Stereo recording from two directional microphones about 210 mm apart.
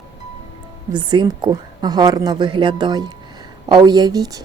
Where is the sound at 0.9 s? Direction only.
20° right (ahead or behind).